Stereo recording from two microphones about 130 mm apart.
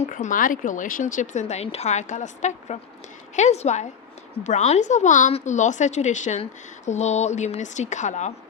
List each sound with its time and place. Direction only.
0.0 s speech: 80° left